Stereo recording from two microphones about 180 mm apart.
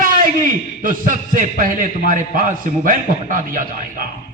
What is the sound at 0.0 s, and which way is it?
A man's voice, 50° right (ahead or behind).